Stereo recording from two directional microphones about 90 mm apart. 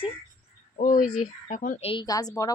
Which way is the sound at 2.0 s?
45° left (ahead or behind).